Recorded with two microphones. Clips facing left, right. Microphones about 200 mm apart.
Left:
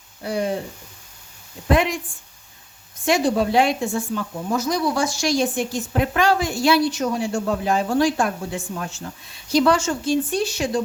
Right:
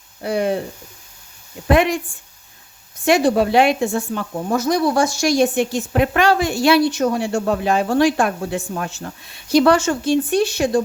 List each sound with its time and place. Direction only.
0.2 s speech: 65° right (ahead or behind)
1.6 s speech: 65° right (ahead or behind)
3.1 s speech: 65° right (ahead or behind)